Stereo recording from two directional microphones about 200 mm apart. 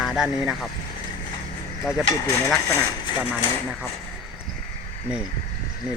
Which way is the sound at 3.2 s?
5° right (ahead or behind).